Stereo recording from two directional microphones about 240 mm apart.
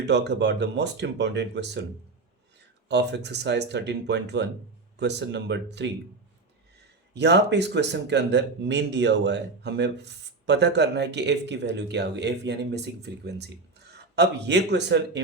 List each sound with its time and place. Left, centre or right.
0.0 s speech: right
2.9 s speech: right
7.1 s speech: right